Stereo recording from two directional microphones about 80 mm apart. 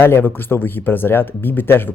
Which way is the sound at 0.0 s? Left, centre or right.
Left.